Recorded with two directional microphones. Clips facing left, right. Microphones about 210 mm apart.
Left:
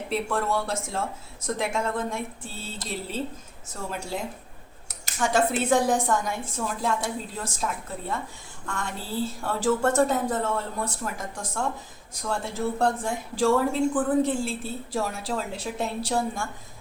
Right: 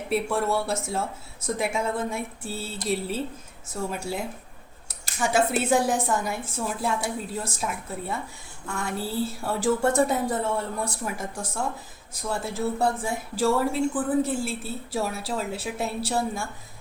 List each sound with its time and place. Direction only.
0.1 s a woman's voice: 10° right (ahead or behind)